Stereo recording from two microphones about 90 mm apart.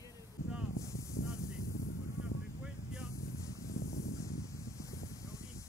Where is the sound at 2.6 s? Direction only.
5° right (ahead or behind).